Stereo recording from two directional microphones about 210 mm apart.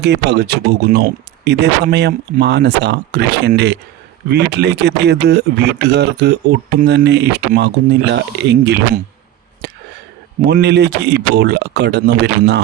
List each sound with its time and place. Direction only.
0.0 s speech: 55° right (ahead or behind)
10.4 s speech: 55° right (ahead or behind)